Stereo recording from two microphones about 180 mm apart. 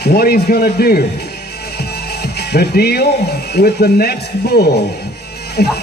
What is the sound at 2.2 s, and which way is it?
A man's voice, 60° left (ahead or behind).